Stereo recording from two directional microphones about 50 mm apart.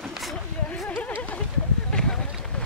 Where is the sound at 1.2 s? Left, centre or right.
Left.